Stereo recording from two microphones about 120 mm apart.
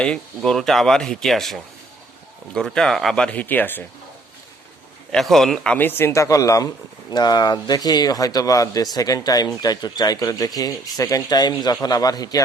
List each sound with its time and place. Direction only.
0.0 s speech: 5° left (ahead or behind)
5.1 s speech: centre (ahead or behind); by 12.4 s 30° left (ahead or behind)